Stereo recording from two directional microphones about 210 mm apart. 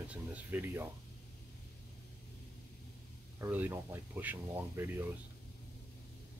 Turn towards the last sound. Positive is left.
turn(degrees=-10)  # may be behind; listen again after turning